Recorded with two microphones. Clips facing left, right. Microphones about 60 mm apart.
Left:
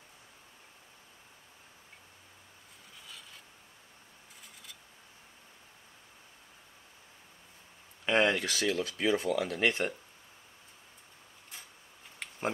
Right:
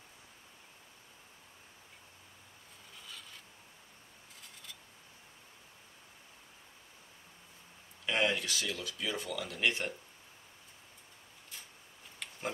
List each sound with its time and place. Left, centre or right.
3.1 s filing: centre
8.0 s speech: left